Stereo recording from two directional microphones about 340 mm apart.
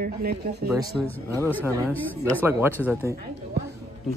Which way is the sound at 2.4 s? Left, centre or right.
Centre.